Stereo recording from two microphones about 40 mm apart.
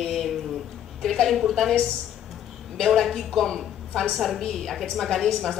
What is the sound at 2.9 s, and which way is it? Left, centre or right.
A woman's voice, centre.